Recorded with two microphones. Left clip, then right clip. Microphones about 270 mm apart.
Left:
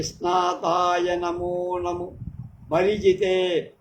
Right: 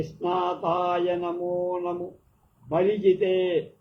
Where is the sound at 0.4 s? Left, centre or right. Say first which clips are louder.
Left 4 dB; left.